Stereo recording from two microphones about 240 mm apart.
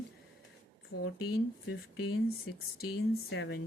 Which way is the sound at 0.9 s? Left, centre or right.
Left.